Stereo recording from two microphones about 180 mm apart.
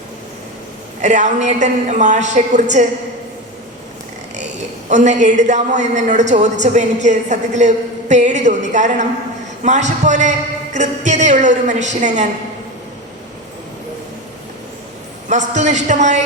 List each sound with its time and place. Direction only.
1.0 s a woman's voice: 40° right (ahead or behind)
4.9 s a woman's voice: 40° right (ahead or behind)
15.3 s a woman's voice: 40° right (ahead or behind)